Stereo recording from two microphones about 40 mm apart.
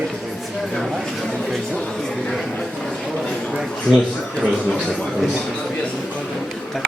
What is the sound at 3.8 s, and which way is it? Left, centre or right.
Speech, left.